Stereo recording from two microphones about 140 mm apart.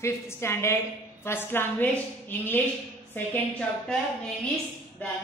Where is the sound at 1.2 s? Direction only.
15° left (ahead or behind).